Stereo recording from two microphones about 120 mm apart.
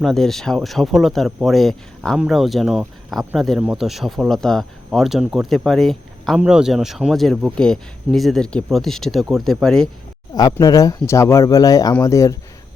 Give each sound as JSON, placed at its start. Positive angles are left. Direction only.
{"t": 0.0, "sound": "speech", "side_deg": 0}
{"t": 3.6, "sound": "speech", "side_deg": -10}
{"t": 3.8, "sound": "speech", "side_deg": 0}
{"t": 10.3, "sound": "speech", "side_deg": 30}